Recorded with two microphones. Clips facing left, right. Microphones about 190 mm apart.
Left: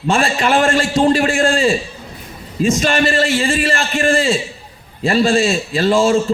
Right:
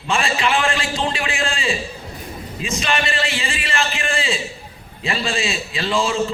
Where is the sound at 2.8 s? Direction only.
45° left (ahead or behind).